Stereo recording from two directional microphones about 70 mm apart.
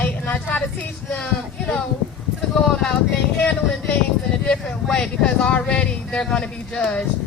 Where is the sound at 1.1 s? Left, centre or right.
Centre.